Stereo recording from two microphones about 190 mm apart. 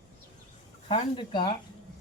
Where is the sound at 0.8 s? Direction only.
30° left (ahead or behind).